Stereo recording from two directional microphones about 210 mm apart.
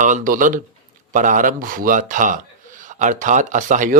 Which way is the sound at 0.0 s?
40° right (ahead or behind).